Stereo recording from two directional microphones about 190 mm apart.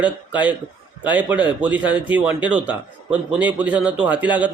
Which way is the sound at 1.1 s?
10° right (ahead or behind).